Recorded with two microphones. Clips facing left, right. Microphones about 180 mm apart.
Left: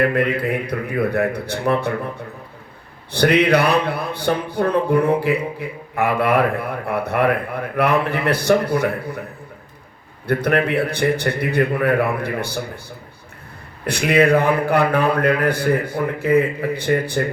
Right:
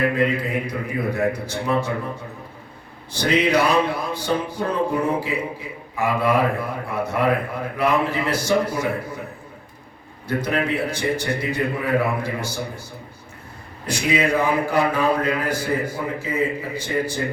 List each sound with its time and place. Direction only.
0.2 s a man's voice: 60° left (ahead or behind)
3.1 s a man's voice: 60° left (ahead or behind)
10.2 s a man's voice: 60° left (ahead or behind)
13.8 s a man's voice: 60° left (ahead or behind)